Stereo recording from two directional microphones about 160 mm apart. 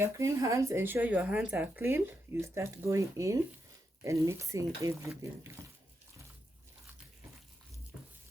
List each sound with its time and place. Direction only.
0.0 s speech: 20° right (ahead or behind)